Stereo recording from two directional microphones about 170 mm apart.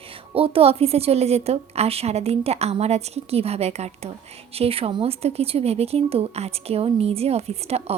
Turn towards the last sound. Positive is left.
turn(degrees=-40)  # may be behind; listen again after turning